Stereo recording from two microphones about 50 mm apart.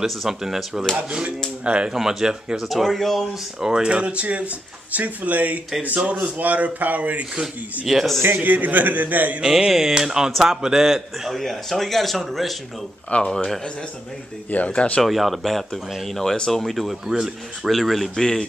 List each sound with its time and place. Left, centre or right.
0.0 s speech: centre
0.9 s speech: right
2.0 s a man's voice: centre
3.6 s a man's voice: centre
7.8 s a man's voice: centre
8.4 s a man's voice: right
9.4 s a man's voice: centre
13.1 s speech: centre
14.7 s speech: left
15.0 s a man's voice: centre